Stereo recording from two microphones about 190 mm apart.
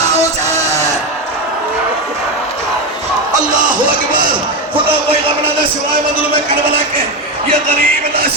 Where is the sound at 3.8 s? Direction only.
45° right (ahead or behind).